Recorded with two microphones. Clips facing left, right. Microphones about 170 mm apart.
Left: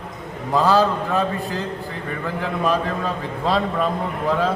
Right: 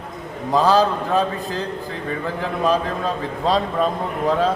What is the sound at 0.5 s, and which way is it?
Speech, 15° right (ahead or behind).